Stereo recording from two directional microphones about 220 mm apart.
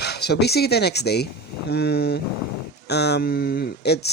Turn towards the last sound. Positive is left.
turn(degrees=50)  # may be behind; listen again after turning